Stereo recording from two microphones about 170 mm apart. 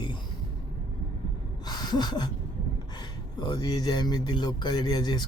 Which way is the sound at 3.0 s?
25° left (ahead or behind).